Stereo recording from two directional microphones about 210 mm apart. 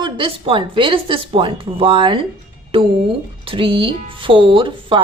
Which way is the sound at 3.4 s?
25° right (ahead or behind).